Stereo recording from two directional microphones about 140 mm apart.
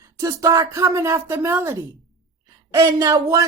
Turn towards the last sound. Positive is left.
turn(degrees=-25)  # may be behind; listen again after turning